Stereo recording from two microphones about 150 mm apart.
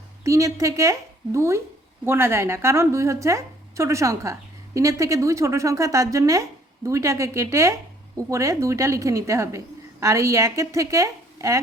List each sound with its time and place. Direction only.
0.3 s a woman's voice: 20° right (ahead or behind)